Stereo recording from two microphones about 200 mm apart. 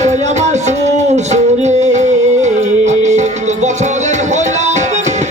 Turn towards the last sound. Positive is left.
turn(degrees=-35)  # may be behind; listen again after turning